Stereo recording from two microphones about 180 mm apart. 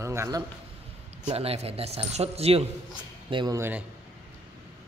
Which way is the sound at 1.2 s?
35° right (ahead or behind).